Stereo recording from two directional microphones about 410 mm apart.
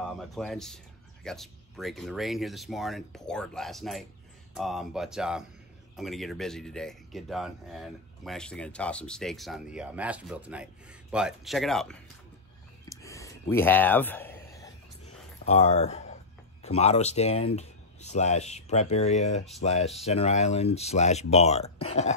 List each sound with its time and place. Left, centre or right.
0.2 s speech: centre
12.8 s a sound: centre
16.6 s speech: centre